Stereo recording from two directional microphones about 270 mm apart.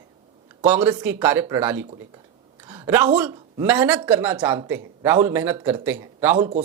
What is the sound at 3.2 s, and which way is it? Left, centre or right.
A man's voice, centre.